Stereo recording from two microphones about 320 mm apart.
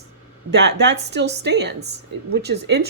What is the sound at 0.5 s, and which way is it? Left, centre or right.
Speech, right.